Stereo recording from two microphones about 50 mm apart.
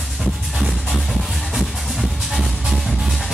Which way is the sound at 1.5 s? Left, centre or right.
Centre.